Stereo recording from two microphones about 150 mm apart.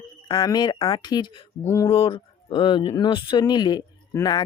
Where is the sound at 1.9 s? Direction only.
35° left (ahead or behind).